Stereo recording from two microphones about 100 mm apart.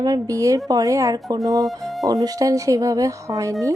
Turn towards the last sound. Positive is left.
turn(degrees=-35)  # may be behind; listen again after turning